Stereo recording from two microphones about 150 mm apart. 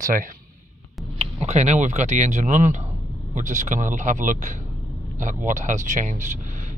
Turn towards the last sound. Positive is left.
turn(degrees=-55)  # may be behind; listen again after turning